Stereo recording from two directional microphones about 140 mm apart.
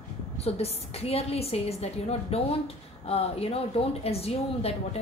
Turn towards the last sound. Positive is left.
turn(degrees=45)  # may be behind; listen again after turning